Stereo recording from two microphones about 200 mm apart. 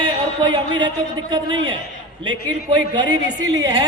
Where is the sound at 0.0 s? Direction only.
25° right (ahead or behind).